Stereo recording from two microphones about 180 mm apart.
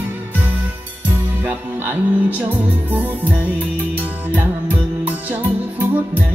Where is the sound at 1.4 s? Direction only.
10° right (ahead or behind).